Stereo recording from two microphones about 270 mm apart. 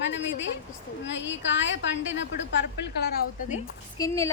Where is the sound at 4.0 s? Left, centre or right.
Centre.